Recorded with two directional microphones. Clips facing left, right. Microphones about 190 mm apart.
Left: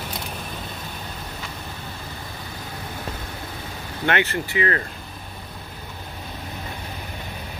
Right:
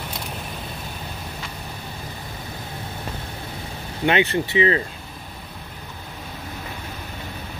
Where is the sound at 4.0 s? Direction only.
15° right (ahead or behind).